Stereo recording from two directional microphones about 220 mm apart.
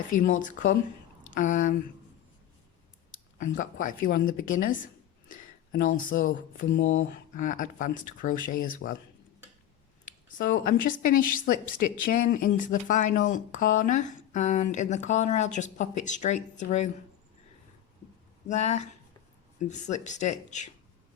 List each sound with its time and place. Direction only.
0.2 s speech: 35° left (ahead or behind)
3.3 s speech: 35° left (ahead or behind)
5.3 s a sound: 40° left (ahead or behind)
6.1 s speech: 40° left (ahead or behind)
10.1 s speech: 35° left (ahead or behind)
18.4 s speech: 30° left (ahead or behind)